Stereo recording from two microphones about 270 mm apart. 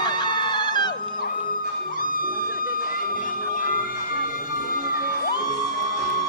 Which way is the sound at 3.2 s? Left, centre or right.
Left.